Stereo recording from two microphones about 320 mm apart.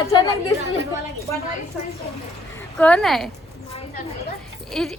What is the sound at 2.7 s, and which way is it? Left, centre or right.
Speech, centre.